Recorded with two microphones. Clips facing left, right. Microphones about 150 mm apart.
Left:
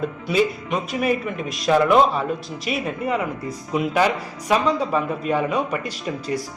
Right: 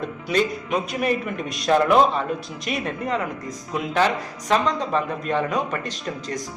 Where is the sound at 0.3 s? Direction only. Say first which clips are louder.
Left 1 dB; centre (ahead or behind).